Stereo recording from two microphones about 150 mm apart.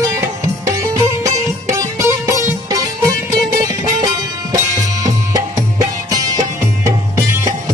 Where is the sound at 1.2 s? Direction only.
20° right (ahead or behind).